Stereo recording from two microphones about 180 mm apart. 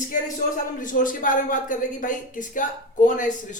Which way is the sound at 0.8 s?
50° left (ahead or behind).